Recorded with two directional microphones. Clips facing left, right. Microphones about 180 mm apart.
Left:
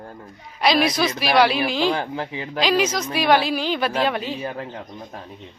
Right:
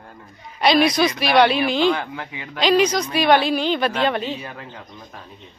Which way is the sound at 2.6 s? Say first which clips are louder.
Right 4 dB; 5° left (ahead or behind).